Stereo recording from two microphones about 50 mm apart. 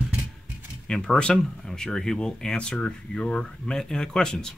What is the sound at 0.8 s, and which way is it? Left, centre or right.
Speech, centre.